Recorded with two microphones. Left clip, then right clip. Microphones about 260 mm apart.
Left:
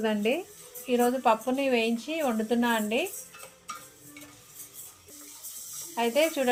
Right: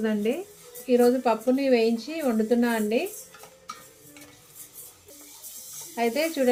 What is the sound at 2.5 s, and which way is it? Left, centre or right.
Speech, left.